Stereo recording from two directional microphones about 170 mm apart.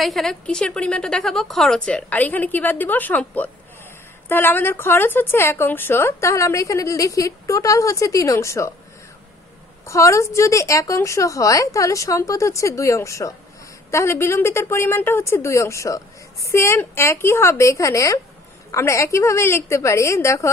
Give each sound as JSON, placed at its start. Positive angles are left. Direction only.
{"t": 0.0, "sound": "a woman's voice", "side_deg": 0}
{"t": 9.8, "sound": "speech", "side_deg": 15}